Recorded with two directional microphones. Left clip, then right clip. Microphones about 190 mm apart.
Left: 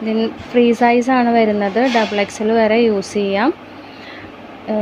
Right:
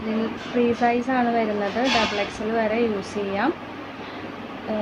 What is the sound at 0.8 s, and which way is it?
Speech, 50° left (ahead or behind).